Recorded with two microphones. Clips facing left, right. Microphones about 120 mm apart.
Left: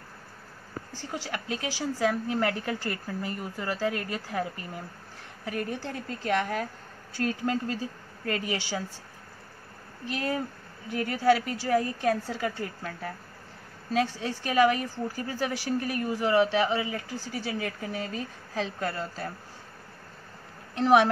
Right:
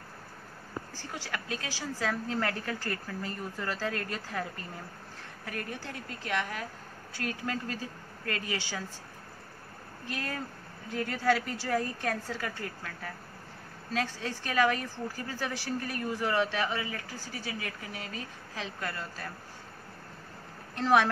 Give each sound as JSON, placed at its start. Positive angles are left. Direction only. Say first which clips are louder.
{"t": 0.9, "sound": "a woman's voice", "louder": "left 7 dB", "side_deg": 20}
{"t": 5.9, "sound": "speech", "louder": "left 7 dB", "side_deg": 35}
{"t": 10.0, "sound": "speech", "louder": "left 7 dB", "side_deg": 20}
{"t": 10.9, "sound": "a woman's voice", "louder": "left 5 dB", "side_deg": 10}
{"t": 12.3, "sound": "a woman's voice", "louder": "left 5 dB", "side_deg": 25}
{"t": 20.7, "sound": "speech", "louder": "left 4 dB", "side_deg": 20}